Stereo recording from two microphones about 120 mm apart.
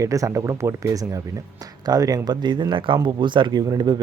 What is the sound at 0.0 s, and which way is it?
Speech, 25° right (ahead or behind).